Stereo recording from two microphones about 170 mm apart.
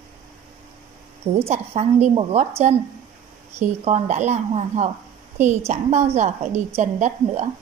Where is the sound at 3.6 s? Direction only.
40° right (ahead or behind).